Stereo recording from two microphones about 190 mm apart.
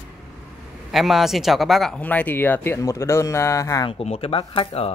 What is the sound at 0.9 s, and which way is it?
Speech, centre (ahead or behind).